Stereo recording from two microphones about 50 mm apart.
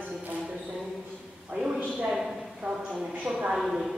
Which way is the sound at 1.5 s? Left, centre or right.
Right.